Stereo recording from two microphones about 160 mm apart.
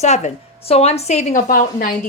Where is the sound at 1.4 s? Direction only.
60° left (ahead or behind).